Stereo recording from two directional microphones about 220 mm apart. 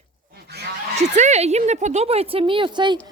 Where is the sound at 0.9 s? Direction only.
30° right (ahead or behind).